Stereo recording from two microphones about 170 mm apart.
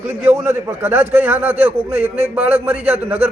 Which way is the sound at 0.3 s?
10° right (ahead or behind).